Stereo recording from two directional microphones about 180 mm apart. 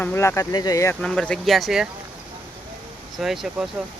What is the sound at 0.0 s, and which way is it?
Speech, 15° left (ahead or behind).